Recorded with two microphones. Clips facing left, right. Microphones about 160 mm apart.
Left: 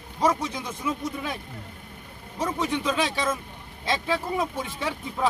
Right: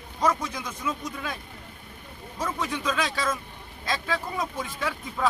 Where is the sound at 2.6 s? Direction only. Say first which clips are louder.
Left 3 dB; 25° left (ahead or behind).